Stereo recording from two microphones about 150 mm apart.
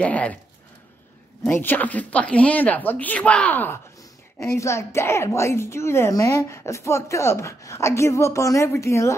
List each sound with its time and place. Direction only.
0.0 s speech: 10° left (ahead or behind)
1.4 s a woman's voice: 15° left (ahead or behind)